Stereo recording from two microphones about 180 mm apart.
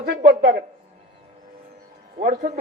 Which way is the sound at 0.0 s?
60° right (ahead or behind).